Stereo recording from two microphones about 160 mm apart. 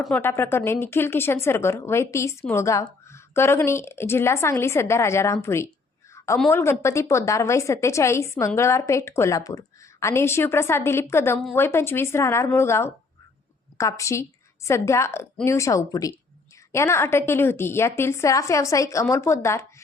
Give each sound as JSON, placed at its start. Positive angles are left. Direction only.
{"t": 0.0, "sound": "speech", "side_deg": 10}
{"t": 6.2, "sound": "a sound", "side_deg": 20}
{"t": 6.5, "sound": "a woman's voice", "side_deg": 15}